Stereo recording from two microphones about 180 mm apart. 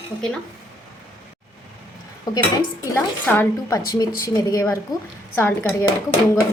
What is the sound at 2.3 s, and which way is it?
Speech, 20° left (ahead or behind).